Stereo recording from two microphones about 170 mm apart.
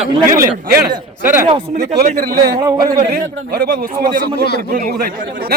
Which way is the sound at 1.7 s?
60° right (ahead or behind).